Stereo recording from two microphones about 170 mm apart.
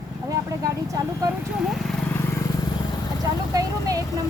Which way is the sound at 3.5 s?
20° right (ahead or behind).